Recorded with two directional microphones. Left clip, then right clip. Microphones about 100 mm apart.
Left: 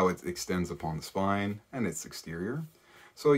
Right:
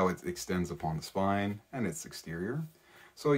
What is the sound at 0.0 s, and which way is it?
Speech, 20° left (ahead or behind).